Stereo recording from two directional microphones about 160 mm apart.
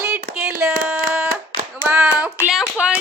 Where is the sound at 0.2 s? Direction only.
60° right (ahead or behind).